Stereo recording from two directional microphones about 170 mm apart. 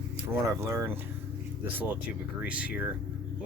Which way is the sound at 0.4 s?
15° right (ahead or behind).